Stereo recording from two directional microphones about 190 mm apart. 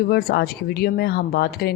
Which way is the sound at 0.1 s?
55° left (ahead or behind).